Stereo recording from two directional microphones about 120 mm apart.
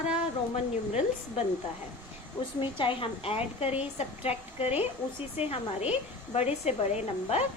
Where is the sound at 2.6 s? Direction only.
45° left (ahead or behind); by 7.4 s 65° left (ahead or behind).